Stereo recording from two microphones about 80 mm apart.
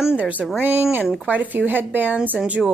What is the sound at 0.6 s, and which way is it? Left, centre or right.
Speech, right.